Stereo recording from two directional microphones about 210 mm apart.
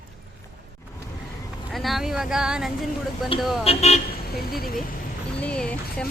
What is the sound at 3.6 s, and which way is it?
Speech, 30° left (ahead or behind).